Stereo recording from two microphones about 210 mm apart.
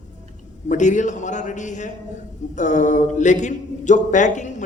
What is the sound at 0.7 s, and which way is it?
A man's voice, 35° left (ahead or behind).